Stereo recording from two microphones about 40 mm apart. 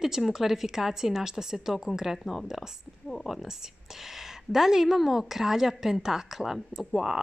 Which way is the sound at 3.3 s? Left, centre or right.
Centre.